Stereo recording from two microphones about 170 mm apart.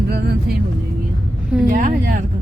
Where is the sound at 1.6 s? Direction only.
55° right (ahead or behind).